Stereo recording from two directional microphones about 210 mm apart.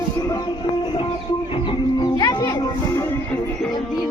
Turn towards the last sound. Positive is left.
turn(degrees=20)  # may be behind; listen again after turning